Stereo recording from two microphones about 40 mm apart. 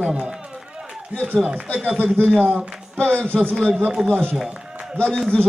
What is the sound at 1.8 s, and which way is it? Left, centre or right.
Speech, right.